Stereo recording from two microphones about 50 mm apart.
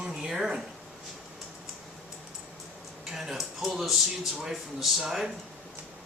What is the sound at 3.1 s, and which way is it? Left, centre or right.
Speech, centre.